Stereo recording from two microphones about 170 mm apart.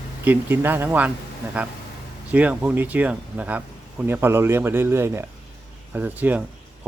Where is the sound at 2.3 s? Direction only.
10° right (ahead or behind).